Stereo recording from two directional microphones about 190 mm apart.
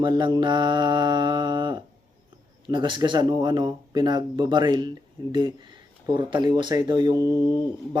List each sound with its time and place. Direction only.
0.0 s speech: 25° right (ahead or behind)